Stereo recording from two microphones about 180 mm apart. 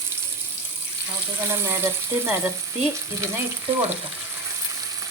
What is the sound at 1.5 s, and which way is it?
Frying, 15° right (ahead or behind).